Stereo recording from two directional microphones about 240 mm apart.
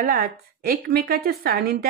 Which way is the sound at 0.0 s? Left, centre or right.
Right.